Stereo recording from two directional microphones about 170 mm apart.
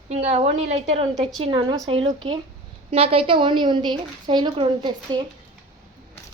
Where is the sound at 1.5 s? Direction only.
25° right (ahead or behind).